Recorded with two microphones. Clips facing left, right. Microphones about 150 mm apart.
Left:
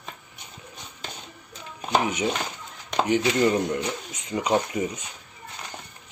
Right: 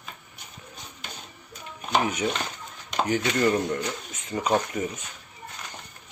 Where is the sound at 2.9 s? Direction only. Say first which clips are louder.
Left 3 dB; 20° left (ahead or behind).